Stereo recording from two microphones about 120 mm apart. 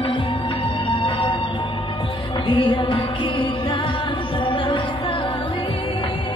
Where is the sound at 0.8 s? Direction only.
45° left (ahead or behind).